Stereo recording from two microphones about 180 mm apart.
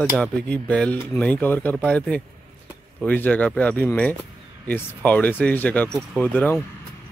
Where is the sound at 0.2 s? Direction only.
5° left (ahead or behind).